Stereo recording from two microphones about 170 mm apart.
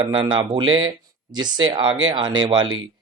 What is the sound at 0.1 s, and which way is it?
Speech, 30° right (ahead or behind).